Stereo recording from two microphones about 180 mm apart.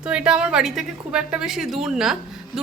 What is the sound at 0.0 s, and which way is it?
A woman's voice, 5° right (ahead or behind).